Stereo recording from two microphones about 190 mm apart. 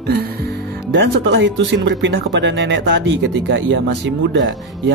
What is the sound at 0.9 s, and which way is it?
Speech, 70° right (ahead or behind).